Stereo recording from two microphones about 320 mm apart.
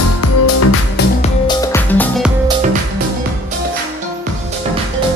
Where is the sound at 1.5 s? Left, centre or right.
Centre.